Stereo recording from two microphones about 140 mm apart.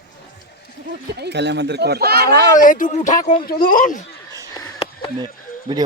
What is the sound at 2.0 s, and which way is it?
Speech, 90° right.